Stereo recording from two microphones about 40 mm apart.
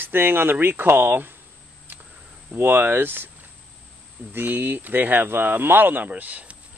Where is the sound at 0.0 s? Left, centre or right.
Right.